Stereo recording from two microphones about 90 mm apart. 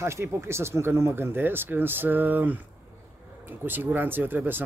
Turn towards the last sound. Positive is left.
turn(degrees=-20)  # may be behind; listen again after turning